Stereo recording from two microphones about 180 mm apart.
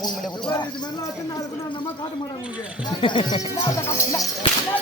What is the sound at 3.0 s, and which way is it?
Speech, 25° left (ahead or behind).